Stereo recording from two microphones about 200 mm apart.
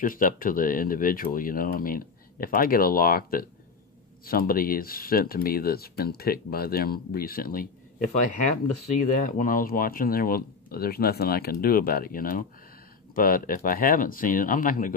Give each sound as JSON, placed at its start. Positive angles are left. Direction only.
{"t": 0.0, "sound": "speech", "side_deg": 45}